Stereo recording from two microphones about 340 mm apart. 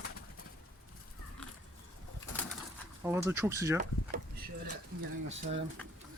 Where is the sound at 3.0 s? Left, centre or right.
Centre.